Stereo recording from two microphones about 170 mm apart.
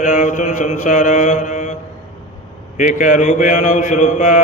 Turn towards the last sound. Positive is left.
turn(degrees=45)  # may be behind; listen again after turning